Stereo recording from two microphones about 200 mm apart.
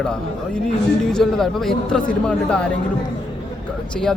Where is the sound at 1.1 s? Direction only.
Centre (ahead or behind).